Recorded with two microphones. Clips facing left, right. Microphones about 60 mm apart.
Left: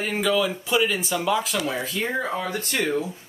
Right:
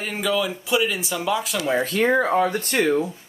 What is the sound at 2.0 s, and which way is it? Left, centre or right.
Speech, right.